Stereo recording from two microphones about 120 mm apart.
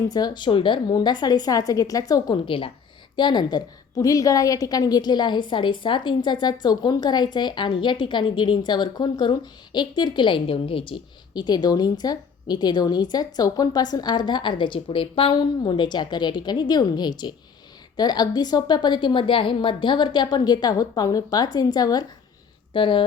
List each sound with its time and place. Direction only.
0.1 s a woman's voice: 35° left (ahead or behind)
2.5 s a woman's voice: 45° left (ahead or behind)
22.7 s speech: 45° left (ahead or behind)